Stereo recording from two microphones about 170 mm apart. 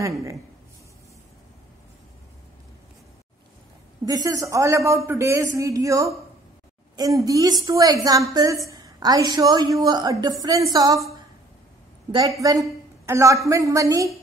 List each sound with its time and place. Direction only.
4.0 s a man's voice: 20° right (ahead or behind)
12.1 s a woman's voice: 20° right (ahead or behind)